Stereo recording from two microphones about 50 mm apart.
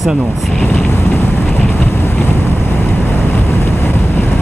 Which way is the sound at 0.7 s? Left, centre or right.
Left.